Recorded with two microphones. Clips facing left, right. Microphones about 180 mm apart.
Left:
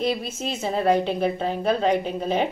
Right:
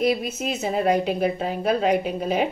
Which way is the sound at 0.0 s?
30° left (ahead or behind).